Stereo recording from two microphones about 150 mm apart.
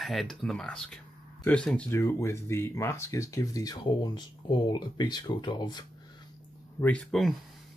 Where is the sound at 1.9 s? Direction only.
20° left (ahead or behind).